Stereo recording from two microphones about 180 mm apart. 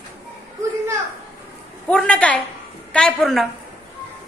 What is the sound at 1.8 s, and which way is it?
A woman's voice, 5° left (ahead or behind).